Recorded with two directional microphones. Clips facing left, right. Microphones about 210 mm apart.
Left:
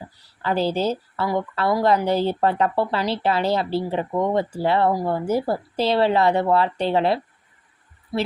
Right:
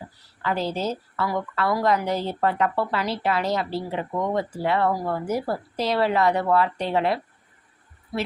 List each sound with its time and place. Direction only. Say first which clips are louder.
0.4 s a woman's voice: left 4 dB; 30° left (ahead or behind)